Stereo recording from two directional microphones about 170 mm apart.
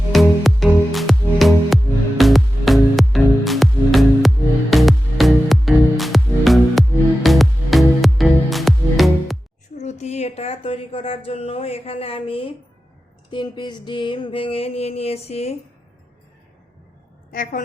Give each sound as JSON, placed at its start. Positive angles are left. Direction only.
{"t": 0.1, "sound": "music", "side_deg": 0}
{"t": 9.7, "sound": "a sound", "side_deg": 40}
{"t": 17.3, "sound": "a woman's voice", "side_deg": 55}